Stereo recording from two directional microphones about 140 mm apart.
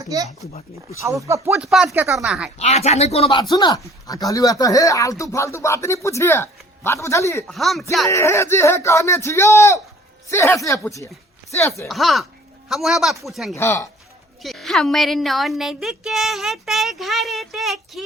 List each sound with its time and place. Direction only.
0.1 s speech: 25° right (ahead or behind)
1.5 s speech: 5° right (ahead or behind)
1.9 s speech: 15° right (ahead or behind)
2.1 s speech: 5° right (ahead or behind)
2.6 s speech: 50° left (ahead or behind)
3.5 s speech: 25° left (ahead or behind)
7.4 s speech: centre (ahead or behind)
8.1 s speech: 20° left (ahead or behind)
11.9 s speech: centre (ahead or behind)
13.6 s speech: 20° left (ahead or behind)
14.4 s speech: centre (ahead or behind)